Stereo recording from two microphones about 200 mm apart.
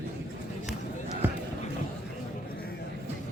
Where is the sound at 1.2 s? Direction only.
10° right (ahead or behind).